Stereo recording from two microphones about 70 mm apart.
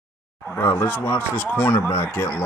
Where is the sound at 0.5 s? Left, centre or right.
Left.